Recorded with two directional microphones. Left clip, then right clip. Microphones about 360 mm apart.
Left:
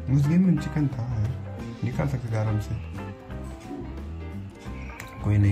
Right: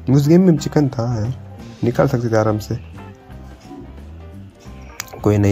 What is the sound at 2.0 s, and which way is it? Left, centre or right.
Speech, right.